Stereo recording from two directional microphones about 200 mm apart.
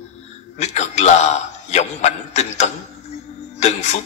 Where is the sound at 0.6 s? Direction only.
35° left (ahead or behind).